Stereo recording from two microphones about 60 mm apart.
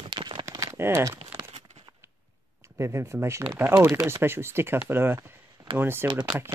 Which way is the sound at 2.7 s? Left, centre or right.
Right.